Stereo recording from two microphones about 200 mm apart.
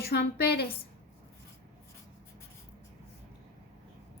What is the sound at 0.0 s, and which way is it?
Speech, 55° left (ahead or behind).